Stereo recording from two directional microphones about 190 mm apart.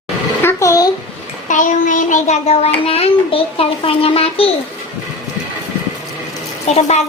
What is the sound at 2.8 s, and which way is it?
A child's voice, 30° left (ahead or behind).